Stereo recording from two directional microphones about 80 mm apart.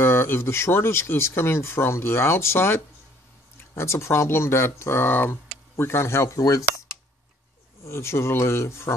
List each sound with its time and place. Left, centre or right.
0.0 s speech: left
7.8 s speech: left